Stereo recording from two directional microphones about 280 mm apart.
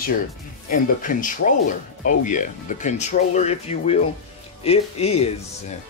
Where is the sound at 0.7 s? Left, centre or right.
Left.